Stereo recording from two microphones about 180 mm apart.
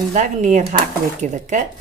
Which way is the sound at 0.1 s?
40° right (ahead or behind).